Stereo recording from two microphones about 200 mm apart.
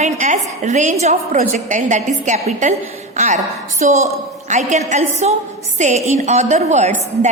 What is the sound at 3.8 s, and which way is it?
A woman's voice, 35° right (ahead or behind).